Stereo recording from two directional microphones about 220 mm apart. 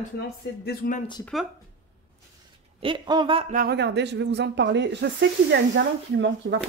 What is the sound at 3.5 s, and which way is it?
Speech, 45° right (ahead or behind).